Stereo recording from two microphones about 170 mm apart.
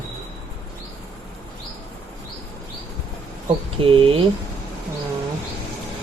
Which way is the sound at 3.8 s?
30° right (ahead or behind).